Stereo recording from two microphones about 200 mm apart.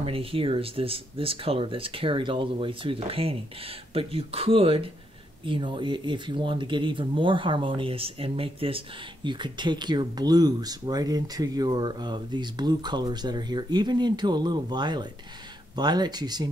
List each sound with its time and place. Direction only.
0.0 s speech: 30° right (ahead or behind)